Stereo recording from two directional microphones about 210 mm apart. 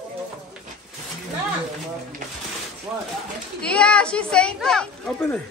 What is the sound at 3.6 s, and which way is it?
Speech, 5° left (ahead or behind).